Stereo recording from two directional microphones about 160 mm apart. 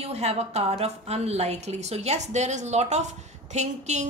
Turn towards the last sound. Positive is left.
turn(degrees=-45)  # may be behind; listen again after turning